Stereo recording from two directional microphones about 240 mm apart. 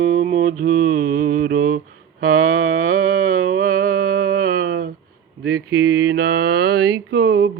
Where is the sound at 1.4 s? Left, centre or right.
Right.